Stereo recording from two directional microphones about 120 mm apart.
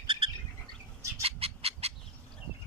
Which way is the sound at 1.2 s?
55° right (ahead or behind).